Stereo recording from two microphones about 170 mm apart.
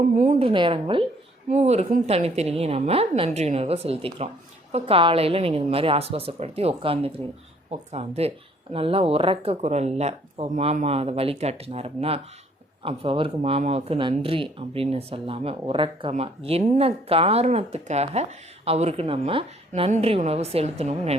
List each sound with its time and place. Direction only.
0.2 s speech: 40° right (ahead or behind)
1.5 s speech: 40° right (ahead or behind)